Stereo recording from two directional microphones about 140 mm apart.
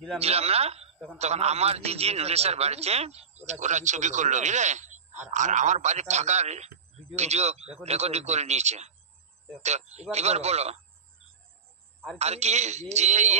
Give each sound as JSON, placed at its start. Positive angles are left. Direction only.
{"t": 0.2, "sound": "a man's voice", "side_deg": -45}
{"t": 12.2, "sound": "a man's voice", "side_deg": -50}